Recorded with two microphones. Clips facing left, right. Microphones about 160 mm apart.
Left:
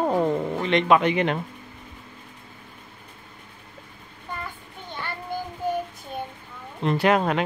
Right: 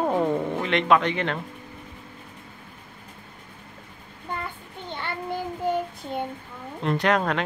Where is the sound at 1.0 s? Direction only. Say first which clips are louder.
Left 4 dB; 15° left (ahead or behind).